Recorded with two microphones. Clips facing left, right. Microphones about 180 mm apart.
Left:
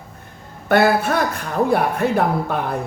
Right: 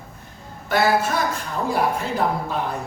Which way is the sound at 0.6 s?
60° left (ahead or behind).